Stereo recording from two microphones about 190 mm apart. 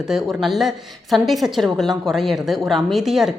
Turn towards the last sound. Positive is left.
turn(degrees=0)  # may be behind; listen again after turning